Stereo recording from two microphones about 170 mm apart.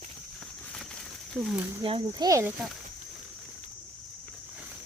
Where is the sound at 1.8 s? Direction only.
30° right (ahead or behind).